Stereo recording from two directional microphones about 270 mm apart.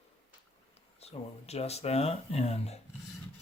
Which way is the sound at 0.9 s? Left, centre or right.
Left.